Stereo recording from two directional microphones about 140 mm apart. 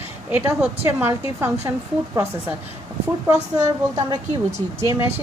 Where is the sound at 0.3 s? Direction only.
10° right (ahead or behind).